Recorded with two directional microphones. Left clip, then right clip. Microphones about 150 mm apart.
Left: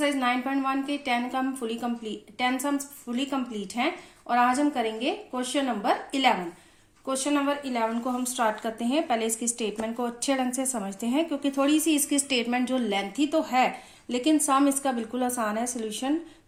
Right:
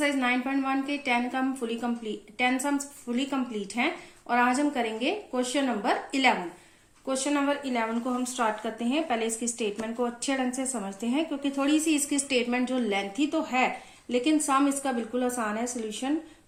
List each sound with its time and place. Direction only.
0.0 s a woman's voice: 25° left (ahead or behind)